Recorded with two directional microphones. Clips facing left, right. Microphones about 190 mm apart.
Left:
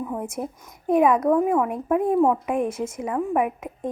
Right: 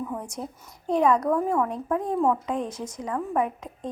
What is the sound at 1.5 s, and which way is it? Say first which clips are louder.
A woman's voice: left 3 dB; 15° left (ahead or behind).